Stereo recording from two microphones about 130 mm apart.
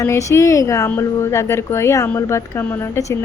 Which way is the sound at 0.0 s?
25° left (ahead or behind).